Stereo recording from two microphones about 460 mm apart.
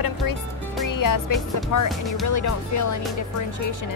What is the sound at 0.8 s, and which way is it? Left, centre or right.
Music, left.